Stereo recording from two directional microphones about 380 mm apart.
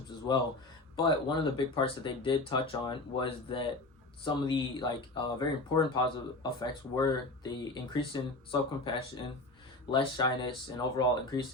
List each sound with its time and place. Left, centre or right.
0.9 s speech: centre